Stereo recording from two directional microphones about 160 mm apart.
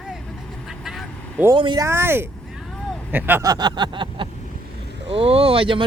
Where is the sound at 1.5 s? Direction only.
30° right (ahead or behind).